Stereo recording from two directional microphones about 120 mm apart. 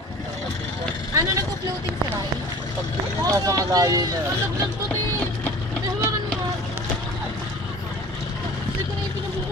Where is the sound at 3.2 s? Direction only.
30° right (ahead or behind).